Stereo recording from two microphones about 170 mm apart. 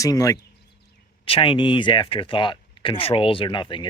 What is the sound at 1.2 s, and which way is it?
Speech, 30° left (ahead or behind).